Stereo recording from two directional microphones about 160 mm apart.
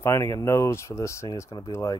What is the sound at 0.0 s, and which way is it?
Speech, 15° left (ahead or behind).